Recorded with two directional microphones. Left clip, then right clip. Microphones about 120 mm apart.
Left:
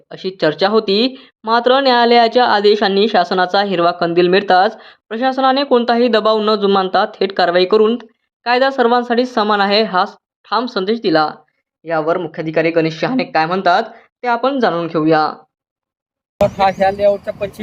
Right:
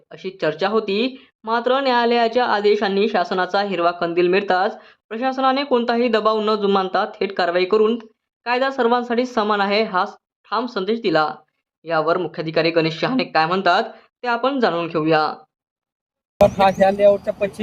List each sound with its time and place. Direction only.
0.1 s a woman's voice: 45° left (ahead or behind); by 11.3 s 30° left (ahead or behind)
11.9 s speech: 20° left (ahead or behind)
16.4 s speech: centre (ahead or behind)
16.8 s speech: 15° right (ahead or behind)